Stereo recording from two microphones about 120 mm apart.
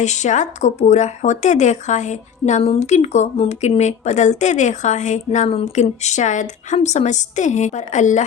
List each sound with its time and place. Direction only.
0.0 s speech: 75° left (ahead or behind)
2.6 s speech: 70° left (ahead or behind); by 5.5 s 85° left
5.5 s speech: 55° left (ahead or behind); by 8.2 s 85° left